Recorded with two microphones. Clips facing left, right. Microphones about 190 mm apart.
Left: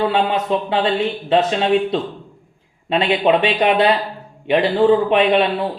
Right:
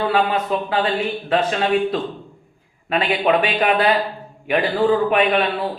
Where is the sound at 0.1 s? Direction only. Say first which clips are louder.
Left 1 dB; 25° left (ahead or behind).